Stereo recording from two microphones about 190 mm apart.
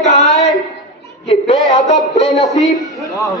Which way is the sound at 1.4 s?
35° left (ahead or behind).